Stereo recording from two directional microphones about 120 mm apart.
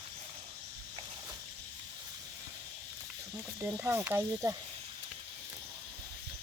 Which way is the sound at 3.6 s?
15° right (ahead or behind).